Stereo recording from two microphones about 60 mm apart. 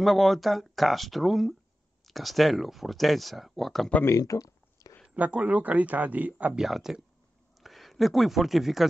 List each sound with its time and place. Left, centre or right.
0.0 s speech: centre
4.2 s a sound: left
5.1 s a man's voice: right
6.5 s speech: centre